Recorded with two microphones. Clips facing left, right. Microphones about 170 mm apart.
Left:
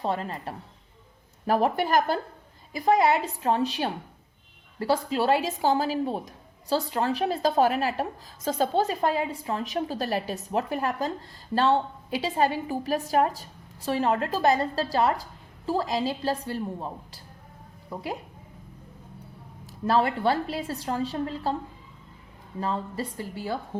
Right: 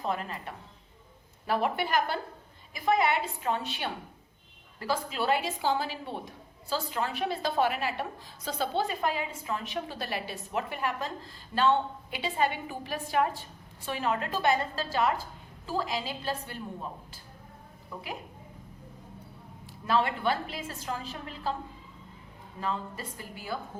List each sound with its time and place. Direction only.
0.0 s a woman's voice: 30° left (ahead or behind)
19.9 s a woman's voice: 35° left (ahead or behind)
22.6 s a woman's voice: 35° left (ahead or behind)